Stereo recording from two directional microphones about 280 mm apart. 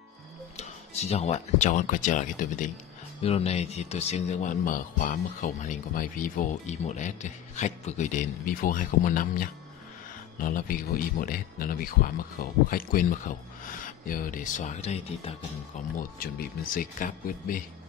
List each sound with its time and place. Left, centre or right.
0.6 s speech: left